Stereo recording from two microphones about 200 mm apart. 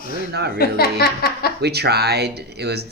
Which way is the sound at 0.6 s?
50° left (ahead or behind).